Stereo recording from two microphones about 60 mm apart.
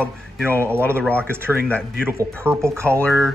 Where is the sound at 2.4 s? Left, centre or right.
Right.